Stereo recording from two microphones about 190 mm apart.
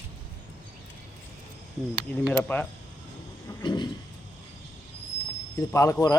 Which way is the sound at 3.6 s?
25° left (ahead or behind).